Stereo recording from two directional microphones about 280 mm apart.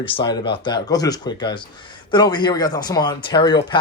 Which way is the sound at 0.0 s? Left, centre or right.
Centre.